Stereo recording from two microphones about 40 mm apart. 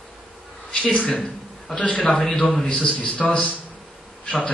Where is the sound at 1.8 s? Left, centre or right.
Left.